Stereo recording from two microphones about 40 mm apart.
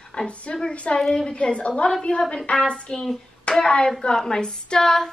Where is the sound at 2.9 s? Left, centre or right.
Left.